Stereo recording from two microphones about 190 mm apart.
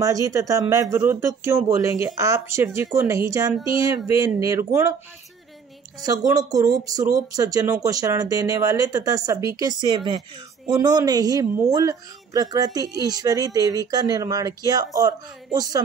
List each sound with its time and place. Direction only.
0.0 s speech: 15° right (ahead or behind)
6.0 s speech: 20° right (ahead or behind)